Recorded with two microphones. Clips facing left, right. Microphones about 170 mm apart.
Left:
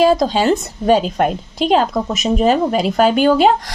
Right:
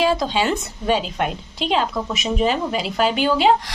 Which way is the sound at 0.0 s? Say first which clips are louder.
Left 6 dB; 40° left (ahead or behind).